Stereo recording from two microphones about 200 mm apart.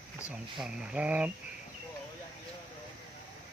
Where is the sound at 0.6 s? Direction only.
5° right (ahead or behind).